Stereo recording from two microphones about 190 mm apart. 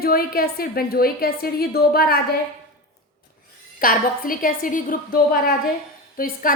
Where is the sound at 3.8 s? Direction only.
50° left (ahead or behind).